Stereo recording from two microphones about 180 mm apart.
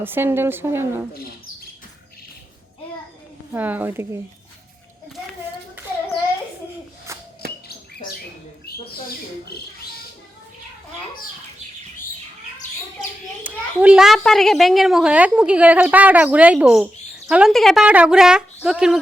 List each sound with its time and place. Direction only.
0.0 s a woman's voice: 10° right (ahead or behind)
3.5 s a woman's voice: 10° right (ahead or behind)
7.1 s a sound: 15° right (ahead or behind)
8.7 s owl: 60° left (ahead or behind)
13.4 s a child's voice: 5° right (ahead or behind)